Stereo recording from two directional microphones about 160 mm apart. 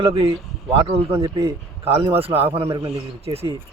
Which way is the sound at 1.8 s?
35° right (ahead or behind).